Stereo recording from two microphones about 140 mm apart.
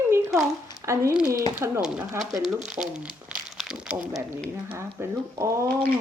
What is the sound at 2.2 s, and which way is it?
Speech, centre (ahead or behind).